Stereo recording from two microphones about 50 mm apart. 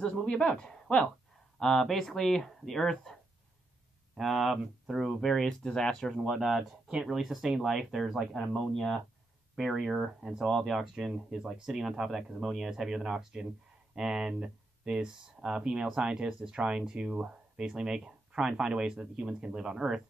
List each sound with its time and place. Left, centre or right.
0.0 s speech: centre
4.2 s speech: centre
5.2 s speech: centre
6.1 s speech: centre